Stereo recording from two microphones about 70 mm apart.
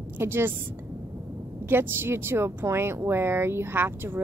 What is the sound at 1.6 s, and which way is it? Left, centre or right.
Speech, right.